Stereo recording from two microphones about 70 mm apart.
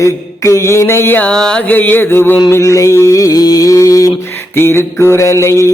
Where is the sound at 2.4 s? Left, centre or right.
Left.